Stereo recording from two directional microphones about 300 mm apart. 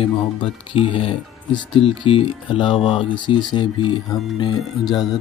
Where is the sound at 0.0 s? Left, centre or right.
Centre.